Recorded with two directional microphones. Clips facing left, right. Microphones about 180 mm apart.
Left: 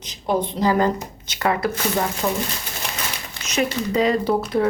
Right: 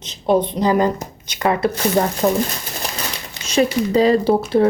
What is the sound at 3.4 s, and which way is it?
Speech, 30° right (ahead or behind).